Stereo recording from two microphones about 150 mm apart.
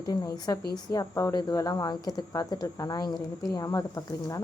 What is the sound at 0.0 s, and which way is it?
A woman's voice, 25° left (ahead or behind).